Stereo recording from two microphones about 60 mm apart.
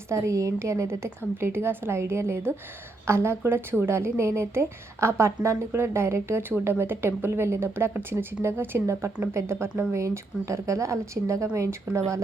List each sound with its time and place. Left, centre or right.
0.1 s a woman's voice: right